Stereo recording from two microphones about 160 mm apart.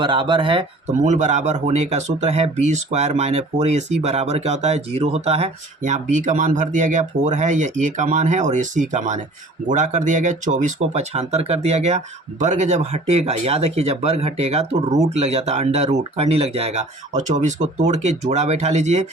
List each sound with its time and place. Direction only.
0.0 s speech: 30° right (ahead or behind)
0.9 s speech: 45° right (ahead or behind)